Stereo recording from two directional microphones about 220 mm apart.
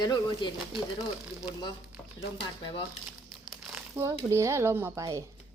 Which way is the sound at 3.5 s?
5° right (ahead or behind).